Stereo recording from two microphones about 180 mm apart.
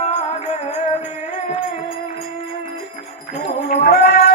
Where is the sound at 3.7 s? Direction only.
60° left (ahead or behind).